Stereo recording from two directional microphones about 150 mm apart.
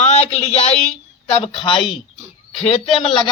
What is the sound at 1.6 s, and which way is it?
Speech, 35° left (ahead or behind).